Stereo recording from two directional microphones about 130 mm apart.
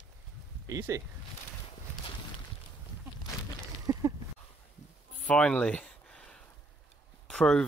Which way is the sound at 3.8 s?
25° right (ahead or behind).